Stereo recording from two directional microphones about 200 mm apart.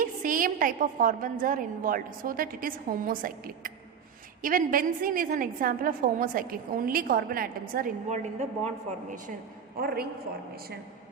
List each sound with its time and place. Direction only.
0.0 s a woman's voice: 40° right (ahead or behind)
9.7 s a woman's voice: 50° right (ahead or behind)